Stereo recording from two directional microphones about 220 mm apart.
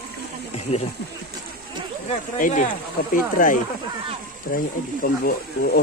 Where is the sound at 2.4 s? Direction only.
35° left (ahead or behind).